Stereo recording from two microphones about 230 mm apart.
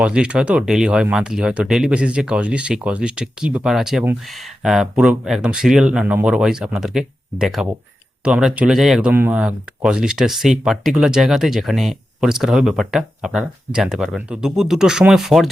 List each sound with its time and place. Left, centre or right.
0.0 s speech: centre